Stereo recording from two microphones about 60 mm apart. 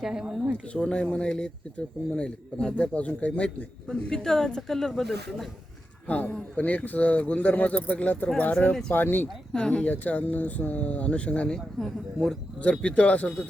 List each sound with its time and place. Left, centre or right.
0.0 s speech: centre
0.7 s a man's voice: centre
6.1 s speech: left
9.5 s a man's voice: centre
11.5 s a man's voice: centre
12.6 s speech: left